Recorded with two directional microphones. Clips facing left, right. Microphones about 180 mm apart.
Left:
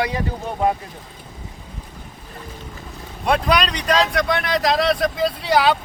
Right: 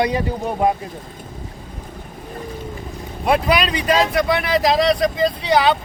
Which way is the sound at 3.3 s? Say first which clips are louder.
Right 1 dB; 5° right (ahead or behind).